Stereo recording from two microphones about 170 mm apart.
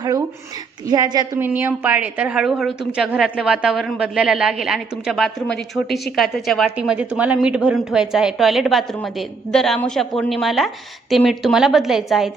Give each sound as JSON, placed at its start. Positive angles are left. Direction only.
{"t": 0.9, "sound": "a woman's voice", "side_deg": -25}
{"t": 1.4, "sound": "a woman's voice", "side_deg": -10}